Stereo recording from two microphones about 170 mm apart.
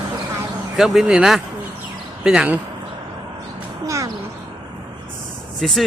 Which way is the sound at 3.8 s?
20° right (ahead or behind).